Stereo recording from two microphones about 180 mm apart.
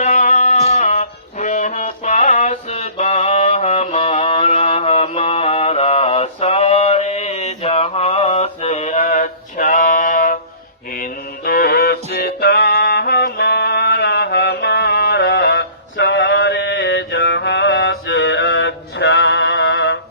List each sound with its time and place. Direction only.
0.0 s music: 45° left (ahead or behind); by 20.0 s 75° left (ahead or behind)